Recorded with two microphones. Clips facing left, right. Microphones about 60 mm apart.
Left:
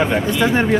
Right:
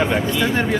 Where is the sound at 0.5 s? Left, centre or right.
Centre.